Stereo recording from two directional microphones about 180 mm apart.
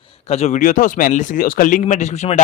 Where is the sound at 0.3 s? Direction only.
40° left (ahead or behind).